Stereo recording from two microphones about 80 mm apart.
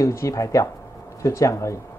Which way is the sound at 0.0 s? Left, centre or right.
Left.